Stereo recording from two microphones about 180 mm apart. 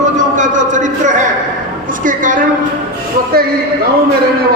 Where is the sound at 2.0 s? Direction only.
45° right (ahead or behind).